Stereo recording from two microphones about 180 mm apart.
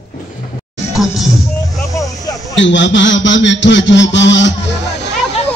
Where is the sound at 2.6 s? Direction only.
90° left.